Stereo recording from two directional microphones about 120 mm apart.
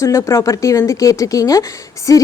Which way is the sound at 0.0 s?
25° left (ahead or behind).